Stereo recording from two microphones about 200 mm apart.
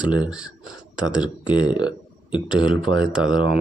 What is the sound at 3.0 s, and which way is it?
Speech, 5° right (ahead or behind).